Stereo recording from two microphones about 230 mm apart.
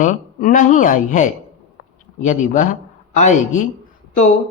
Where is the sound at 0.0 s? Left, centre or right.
Left.